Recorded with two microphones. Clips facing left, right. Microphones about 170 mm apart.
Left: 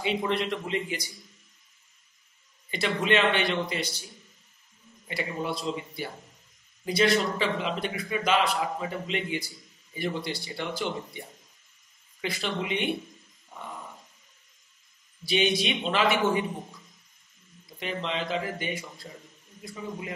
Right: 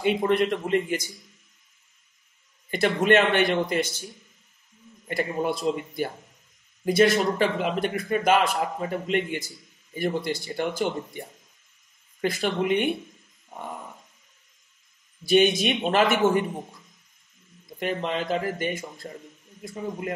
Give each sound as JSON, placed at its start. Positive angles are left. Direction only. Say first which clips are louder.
{"t": 0.0, "sound": "a man's voice", "louder": "right 6 dB", "side_deg": -50}
{"t": 2.7, "sound": "a man's voice", "louder": "right 5 dB", "side_deg": -50}
{"t": 5.0, "sound": "a man's voice", "louder": "right 6 dB", "side_deg": -50}
{"t": 15.2, "sound": "a man's voice", "louder": "right 6 dB", "side_deg": -45}
{"t": 17.7, "sound": "a man's voice", "louder": "right 4 dB", "side_deg": -50}